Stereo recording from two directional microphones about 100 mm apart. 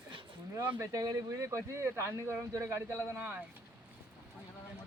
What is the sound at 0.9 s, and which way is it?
Speech, 35° right (ahead or behind).